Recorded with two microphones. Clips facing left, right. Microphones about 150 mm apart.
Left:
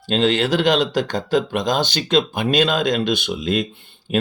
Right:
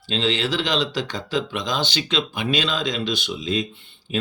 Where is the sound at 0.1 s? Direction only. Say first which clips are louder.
Left 6 dB; 50° left (ahead or behind).